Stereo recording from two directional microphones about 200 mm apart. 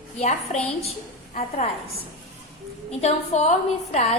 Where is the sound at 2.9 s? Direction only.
30° left (ahead or behind).